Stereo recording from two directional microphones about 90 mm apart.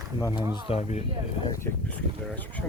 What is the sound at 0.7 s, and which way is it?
Speech, 90° left.